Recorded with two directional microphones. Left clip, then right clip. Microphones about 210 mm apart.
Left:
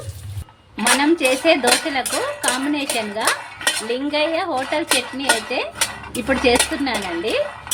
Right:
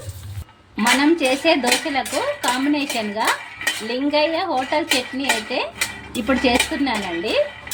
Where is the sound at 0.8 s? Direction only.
Centre (ahead or behind).